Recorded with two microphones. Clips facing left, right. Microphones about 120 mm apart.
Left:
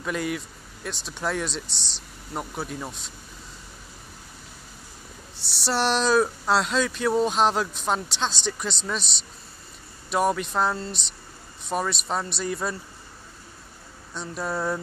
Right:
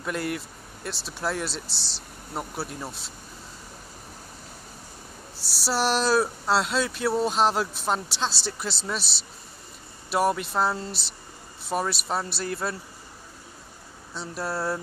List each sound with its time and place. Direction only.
0.0 s speech: centre (ahead or behind)
5.7 s speech: 5° right (ahead or behind)
14.1 s speech: 5° right (ahead or behind)